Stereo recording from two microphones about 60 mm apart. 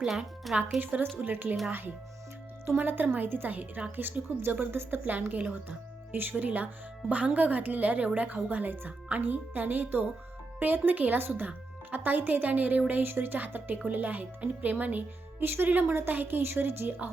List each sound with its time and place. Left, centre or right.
0.0 s speech: centre
0.8 s a woman's voice: right
2.7 s a woman's voice: right